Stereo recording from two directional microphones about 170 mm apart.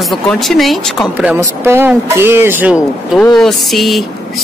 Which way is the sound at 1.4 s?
15° right (ahead or behind).